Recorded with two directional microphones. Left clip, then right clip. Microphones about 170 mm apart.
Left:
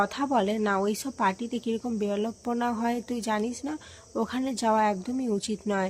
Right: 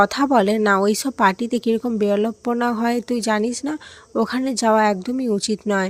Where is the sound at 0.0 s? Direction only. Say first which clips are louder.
Right 9 dB; 40° right (ahead or behind).